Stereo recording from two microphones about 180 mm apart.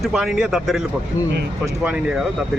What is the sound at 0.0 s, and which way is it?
Speech, 5° right (ahead or behind).